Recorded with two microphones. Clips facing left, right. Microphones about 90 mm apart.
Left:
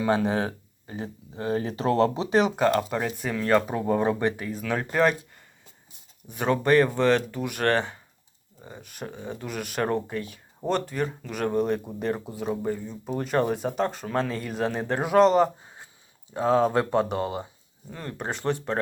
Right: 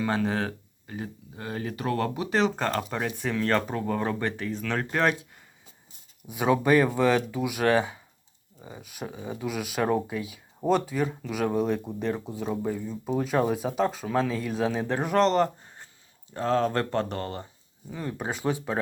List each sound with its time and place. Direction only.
0.0 s speech: 20° left (ahead or behind)
17.9 s speech: 5° right (ahead or behind)